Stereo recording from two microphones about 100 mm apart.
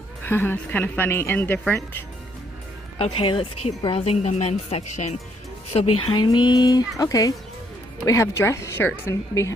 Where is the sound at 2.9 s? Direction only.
70° left (ahead or behind); by 4.8 s 90° left.